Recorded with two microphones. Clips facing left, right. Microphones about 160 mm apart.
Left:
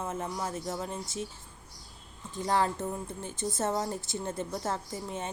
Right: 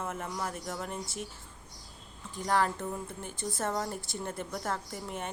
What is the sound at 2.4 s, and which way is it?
Speech, 25° left (ahead or behind).